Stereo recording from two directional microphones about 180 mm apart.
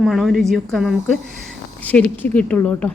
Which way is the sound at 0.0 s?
Centre (ahead or behind).